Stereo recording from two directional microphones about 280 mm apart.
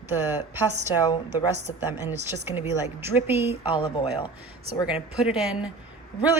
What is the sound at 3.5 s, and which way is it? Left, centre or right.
Speech, centre.